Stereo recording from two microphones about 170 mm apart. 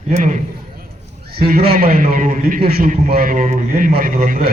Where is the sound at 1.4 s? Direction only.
65° right (ahead or behind).